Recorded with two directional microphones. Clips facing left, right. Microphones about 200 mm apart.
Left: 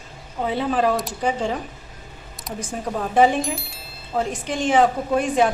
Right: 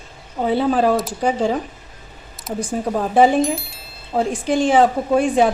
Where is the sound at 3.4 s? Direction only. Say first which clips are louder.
Right 7 dB; centre (ahead or behind).